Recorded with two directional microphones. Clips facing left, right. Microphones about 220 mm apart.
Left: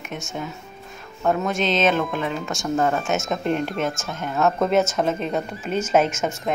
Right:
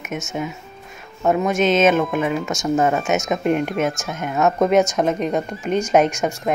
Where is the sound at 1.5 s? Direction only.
Centre (ahead or behind).